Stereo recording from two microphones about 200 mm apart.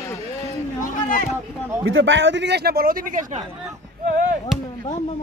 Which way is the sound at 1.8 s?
70° right (ahead or behind).